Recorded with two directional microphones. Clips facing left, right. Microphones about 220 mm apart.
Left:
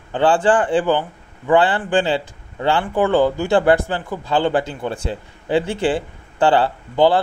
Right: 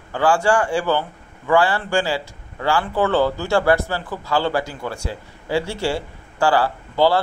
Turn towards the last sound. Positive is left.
turn(degrees=20)  # may be behind; listen again after turning